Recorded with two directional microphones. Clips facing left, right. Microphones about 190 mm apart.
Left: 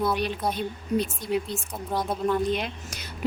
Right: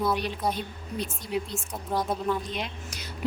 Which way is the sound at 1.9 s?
Centre (ahead or behind).